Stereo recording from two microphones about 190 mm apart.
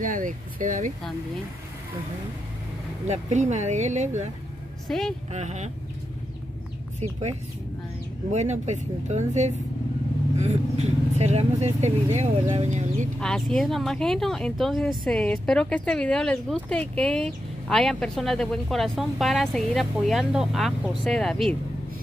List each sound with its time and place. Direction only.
0.0 s speech: 45° right (ahead or behind)
3.1 s speech: 40° right (ahead or behind)
4.8 s speech: centre (ahead or behind)
5.3 s speech: 35° right (ahead or behind)
7.0 s speech: 35° right (ahead or behind)
13.2 s speech: 5° left (ahead or behind)